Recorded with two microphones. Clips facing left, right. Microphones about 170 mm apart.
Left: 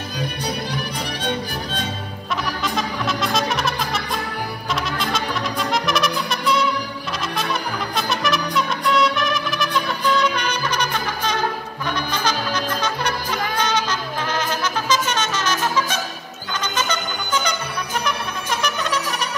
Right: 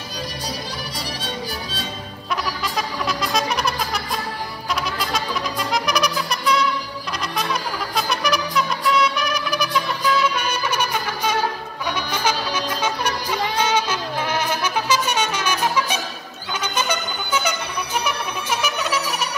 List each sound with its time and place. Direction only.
1.2 s music: 60° left (ahead or behind)
2.6 s music: centre (ahead or behind)
7.9 s music: centre (ahead or behind)